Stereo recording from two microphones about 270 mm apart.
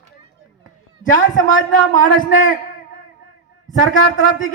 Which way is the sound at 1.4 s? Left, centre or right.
Left.